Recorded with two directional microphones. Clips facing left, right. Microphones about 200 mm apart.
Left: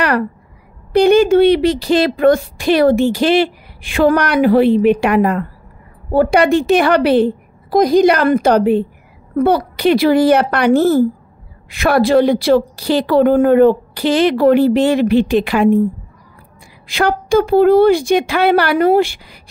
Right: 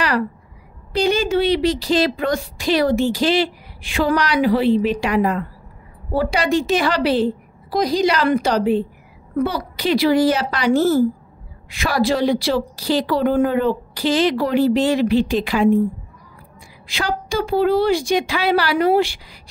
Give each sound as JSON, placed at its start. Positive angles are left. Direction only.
{"t": 0.9, "sound": "speech", "side_deg": 60}
{"t": 16.8, "sound": "speech", "side_deg": 55}